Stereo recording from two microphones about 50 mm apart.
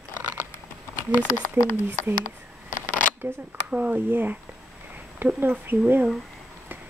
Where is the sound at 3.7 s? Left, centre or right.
Right.